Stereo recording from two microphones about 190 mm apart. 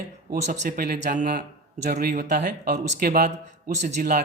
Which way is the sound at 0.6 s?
45° right (ahead or behind).